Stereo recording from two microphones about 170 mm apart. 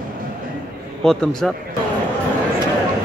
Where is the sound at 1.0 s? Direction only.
5° left (ahead or behind).